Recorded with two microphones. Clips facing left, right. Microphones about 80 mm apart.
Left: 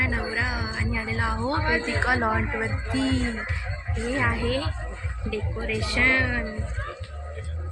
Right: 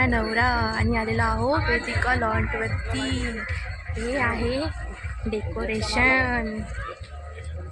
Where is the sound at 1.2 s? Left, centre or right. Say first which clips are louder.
Right 1 dB; centre.